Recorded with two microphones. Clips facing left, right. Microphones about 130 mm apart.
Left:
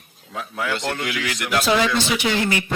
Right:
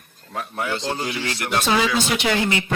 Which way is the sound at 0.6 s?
30° right (ahead or behind).